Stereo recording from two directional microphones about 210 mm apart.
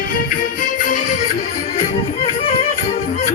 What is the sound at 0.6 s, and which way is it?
Music, 40° left (ahead or behind).